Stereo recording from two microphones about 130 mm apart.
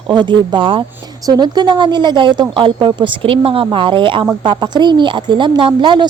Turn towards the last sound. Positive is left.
turn(degrees=-35)  # may be behind; listen again after turning